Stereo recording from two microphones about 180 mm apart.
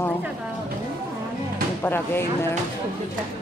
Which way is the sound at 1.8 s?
10° left (ahead or behind).